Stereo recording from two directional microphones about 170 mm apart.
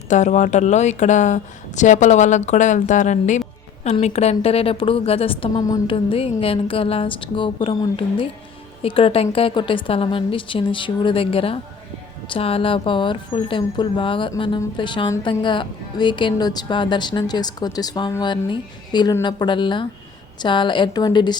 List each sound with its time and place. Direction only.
0.1 s a woman's voice: 45° left (ahead or behind)
5.6 s a woman's voice: 20° left (ahead or behind)
6.1 s a woman's voice: 30° left (ahead or behind)